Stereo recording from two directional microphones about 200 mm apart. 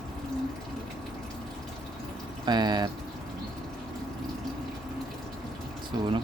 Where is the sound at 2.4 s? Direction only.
20° right (ahead or behind).